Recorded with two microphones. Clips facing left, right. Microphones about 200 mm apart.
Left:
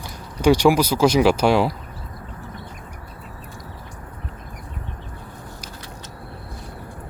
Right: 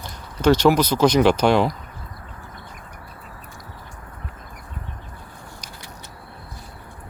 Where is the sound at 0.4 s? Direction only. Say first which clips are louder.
Even; 10° left (ahead or behind).